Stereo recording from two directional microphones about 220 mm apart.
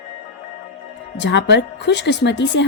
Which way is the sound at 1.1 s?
55° left (ahead or behind).